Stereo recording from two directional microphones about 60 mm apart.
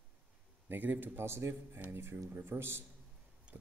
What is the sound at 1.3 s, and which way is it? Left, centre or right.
A man's voice, right.